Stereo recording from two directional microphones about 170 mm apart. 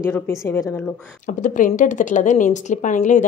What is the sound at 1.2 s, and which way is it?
Speech, 50° left (ahead or behind).